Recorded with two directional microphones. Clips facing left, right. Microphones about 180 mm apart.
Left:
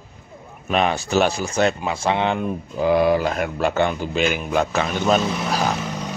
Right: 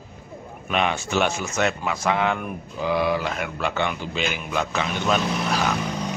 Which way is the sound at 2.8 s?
45° left (ahead or behind).